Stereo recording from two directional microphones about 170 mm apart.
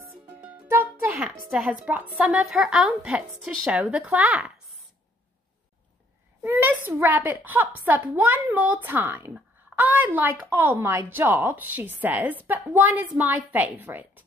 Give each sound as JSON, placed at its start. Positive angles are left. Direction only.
{"t": 0.7, "sound": "music", "side_deg": -10}
{"t": 1.5, "sound": "a woman's voice", "side_deg": -5}
{"t": 6.4, "sound": "a woman's voice", "side_deg": -10}